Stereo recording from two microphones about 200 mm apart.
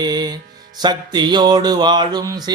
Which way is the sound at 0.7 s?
20° right (ahead or behind).